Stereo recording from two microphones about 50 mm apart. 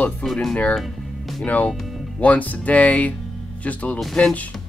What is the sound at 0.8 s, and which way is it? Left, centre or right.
Music, centre.